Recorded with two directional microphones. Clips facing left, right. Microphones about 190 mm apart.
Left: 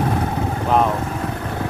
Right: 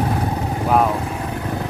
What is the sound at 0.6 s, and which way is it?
Vehicle, 5° right (ahead or behind).